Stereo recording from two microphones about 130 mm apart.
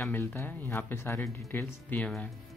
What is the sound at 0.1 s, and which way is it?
Speech, 20° left (ahead or behind).